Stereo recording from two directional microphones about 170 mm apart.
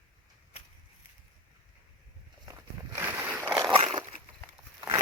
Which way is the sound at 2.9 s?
15° right (ahead or behind).